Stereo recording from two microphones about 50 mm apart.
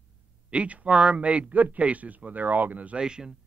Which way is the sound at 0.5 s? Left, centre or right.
Right.